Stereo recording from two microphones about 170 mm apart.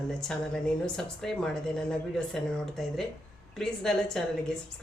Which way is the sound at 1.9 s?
5° left (ahead or behind).